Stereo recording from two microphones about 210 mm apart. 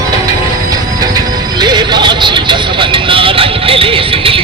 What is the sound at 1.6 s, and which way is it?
Music, 20° right (ahead or behind).